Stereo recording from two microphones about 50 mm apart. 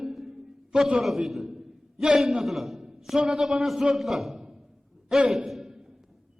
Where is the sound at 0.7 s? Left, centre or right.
Centre.